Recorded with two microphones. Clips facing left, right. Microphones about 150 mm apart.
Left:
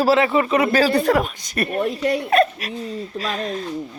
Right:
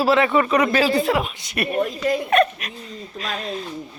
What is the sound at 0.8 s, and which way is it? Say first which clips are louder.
Speech: left 2 dB; 45° left (ahead or behind).